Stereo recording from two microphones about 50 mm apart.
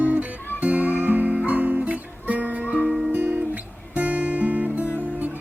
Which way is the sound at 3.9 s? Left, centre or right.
Right.